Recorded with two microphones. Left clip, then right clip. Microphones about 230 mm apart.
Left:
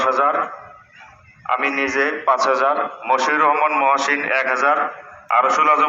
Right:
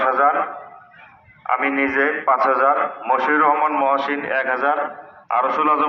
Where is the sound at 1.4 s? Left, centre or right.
Left.